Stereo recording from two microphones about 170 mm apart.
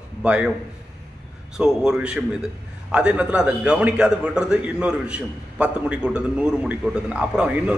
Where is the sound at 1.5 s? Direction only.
5° right (ahead or behind).